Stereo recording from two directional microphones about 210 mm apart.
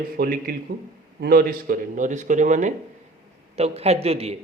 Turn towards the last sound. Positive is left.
turn(degrees=-30)  # may be behind; listen again after turning